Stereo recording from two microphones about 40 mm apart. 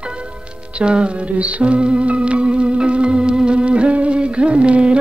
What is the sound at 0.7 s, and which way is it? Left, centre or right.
Music, right.